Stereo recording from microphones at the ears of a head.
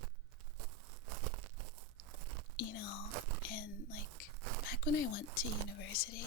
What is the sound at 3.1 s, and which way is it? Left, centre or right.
Whispering, right.